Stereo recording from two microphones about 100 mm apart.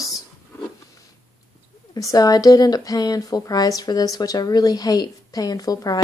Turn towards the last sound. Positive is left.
turn(degrees=40)  # may be behind; listen again after turning